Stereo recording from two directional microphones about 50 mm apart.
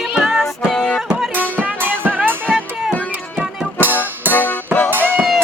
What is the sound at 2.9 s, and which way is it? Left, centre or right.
Music, left.